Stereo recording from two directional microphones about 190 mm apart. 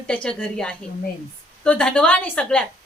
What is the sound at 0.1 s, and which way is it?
Speech, 5° left (ahead or behind).